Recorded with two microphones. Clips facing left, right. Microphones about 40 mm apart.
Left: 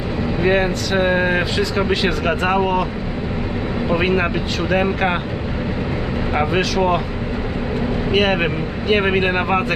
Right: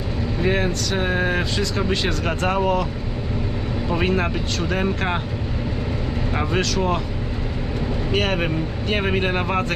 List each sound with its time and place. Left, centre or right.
0.4 s speech: centre
3.8 s speech: centre
6.3 s speech: centre
8.1 s speech: centre